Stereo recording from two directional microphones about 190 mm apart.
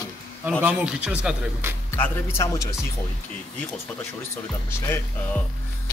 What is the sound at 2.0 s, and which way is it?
Speech, 15° left (ahead or behind).